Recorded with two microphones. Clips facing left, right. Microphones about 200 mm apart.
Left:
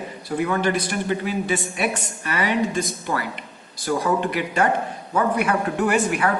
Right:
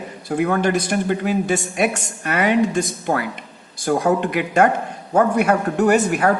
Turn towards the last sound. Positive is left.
turn(degrees=-40)  # may be behind; listen again after turning